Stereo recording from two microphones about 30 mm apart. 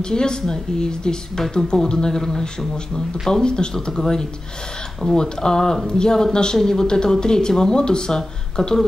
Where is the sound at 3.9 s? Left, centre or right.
Centre.